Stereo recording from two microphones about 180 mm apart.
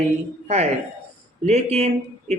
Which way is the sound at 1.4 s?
35° right (ahead or behind).